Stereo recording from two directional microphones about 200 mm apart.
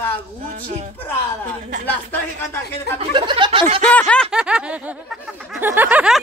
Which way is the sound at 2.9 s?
25° right (ahead or behind).